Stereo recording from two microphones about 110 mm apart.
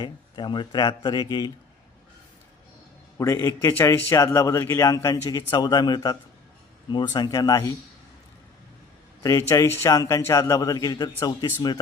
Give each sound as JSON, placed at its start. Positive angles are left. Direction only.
{"t": 0.0, "sound": "speech", "side_deg": 45}
{"t": 3.2, "sound": "a man's voice", "side_deg": 30}
{"t": 9.5, "sound": "a man's voice", "side_deg": 25}